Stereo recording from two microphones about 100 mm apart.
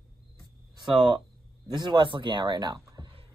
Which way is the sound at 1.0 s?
55° right (ahead or behind).